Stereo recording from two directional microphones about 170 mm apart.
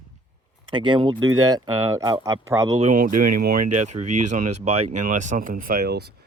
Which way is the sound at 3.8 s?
45° right (ahead or behind).